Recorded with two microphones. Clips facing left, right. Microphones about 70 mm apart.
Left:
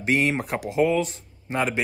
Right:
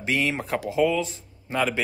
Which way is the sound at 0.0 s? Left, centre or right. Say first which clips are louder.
Left 3 dB; left.